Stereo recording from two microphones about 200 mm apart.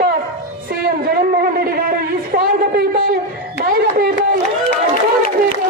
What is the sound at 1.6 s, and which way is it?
A man's voice, 50° right (ahead or behind).